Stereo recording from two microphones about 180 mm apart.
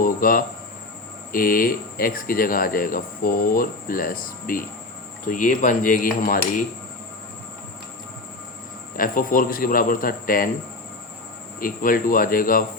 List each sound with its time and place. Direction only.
0.0 s speech: 50° left (ahead or behind)
9.0 s speech: 50° left (ahead or behind)
11.6 s speech: 50° left (ahead or behind)